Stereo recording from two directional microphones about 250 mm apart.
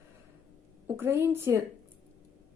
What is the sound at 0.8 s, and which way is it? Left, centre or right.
Speech, centre.